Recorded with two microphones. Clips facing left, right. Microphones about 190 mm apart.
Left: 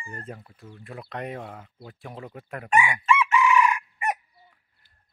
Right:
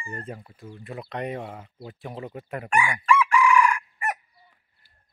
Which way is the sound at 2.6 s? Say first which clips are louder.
Left 1 dB; 20° left (ahead or behind).